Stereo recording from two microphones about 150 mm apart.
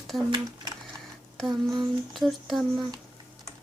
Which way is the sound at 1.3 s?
Centre (ahead or behind).